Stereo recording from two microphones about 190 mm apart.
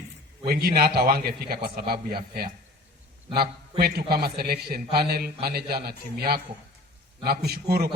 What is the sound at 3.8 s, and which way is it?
A man's voice, 55° right (ahead or behind).